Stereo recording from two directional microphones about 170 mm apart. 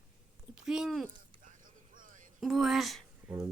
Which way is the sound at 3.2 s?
15° right (ahead or behind).